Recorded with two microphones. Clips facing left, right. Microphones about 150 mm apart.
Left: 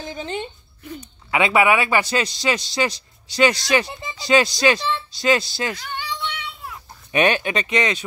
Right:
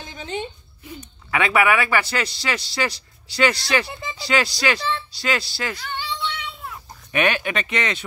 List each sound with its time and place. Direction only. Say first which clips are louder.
1.3 s speech: left 2 dB; 20° left (ahead or behind)
7.1 s speech: left 3 dB; 25° left (ahead or behind)